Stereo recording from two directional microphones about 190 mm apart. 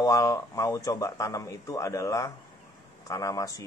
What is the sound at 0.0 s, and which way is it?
Speech, 15° left (ahead or behind).